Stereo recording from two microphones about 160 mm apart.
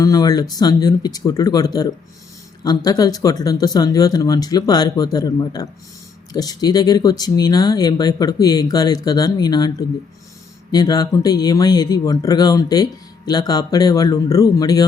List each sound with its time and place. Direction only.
0.0 s speech: 25° left (ahead or behind)